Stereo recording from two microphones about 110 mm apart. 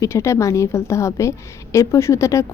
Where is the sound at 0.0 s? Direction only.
25° left (ahead or behind).